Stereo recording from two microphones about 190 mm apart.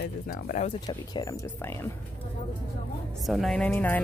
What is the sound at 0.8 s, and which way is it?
Speech, 20° left (ahead or behind).